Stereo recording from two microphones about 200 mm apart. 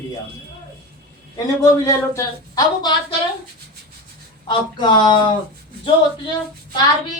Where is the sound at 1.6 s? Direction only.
15° left (ahead or behind).